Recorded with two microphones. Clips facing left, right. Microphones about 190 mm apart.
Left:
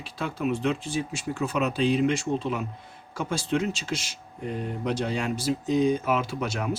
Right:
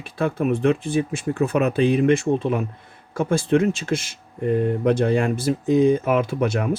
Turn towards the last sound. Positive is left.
turn(degrees=-55)  # may be behind; listen again after turning